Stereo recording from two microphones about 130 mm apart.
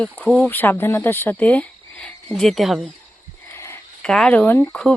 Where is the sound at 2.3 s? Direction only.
Centre (ahead or behind).